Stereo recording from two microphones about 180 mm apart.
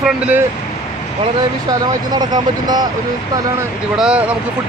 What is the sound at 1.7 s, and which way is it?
Speech, 20° right (ahead or behind).